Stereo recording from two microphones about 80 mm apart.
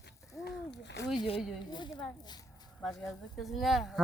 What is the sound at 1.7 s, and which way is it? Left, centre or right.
Speech, left.